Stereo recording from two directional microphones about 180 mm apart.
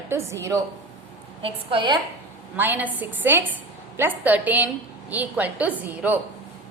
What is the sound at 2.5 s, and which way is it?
A woman's voice, 10° right (ahead or behind).